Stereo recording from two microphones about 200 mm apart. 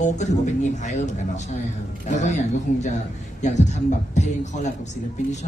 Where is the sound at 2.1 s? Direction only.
35° left (ahead or behind).